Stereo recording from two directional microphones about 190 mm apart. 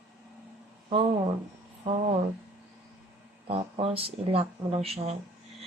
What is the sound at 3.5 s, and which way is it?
Speech, 30° right (ahead or behind).